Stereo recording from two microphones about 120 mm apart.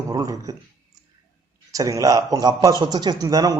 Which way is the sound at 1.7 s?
30° right (ahead or behind).